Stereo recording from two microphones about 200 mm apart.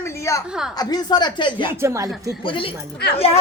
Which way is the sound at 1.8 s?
15° right (ahead or behind).